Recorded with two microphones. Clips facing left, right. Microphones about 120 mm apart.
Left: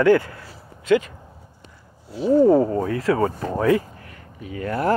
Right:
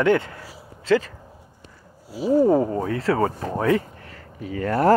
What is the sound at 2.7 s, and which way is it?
Speech, 30° right (ahead or behind).